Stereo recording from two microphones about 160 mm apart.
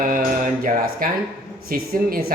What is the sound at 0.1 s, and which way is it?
Mantra, 65° right (ahead or behind).